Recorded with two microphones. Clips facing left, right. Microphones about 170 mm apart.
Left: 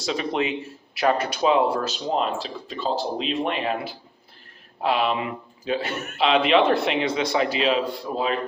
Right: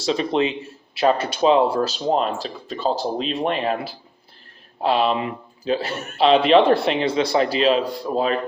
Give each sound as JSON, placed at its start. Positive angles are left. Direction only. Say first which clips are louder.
{"t": 0.0, "sound": "speech", "louder": "right 4 dB", "side_deg": -30}
{"t": 4.8, "sound": "speech", "louder": "right 3 dB", "side_deg": -30}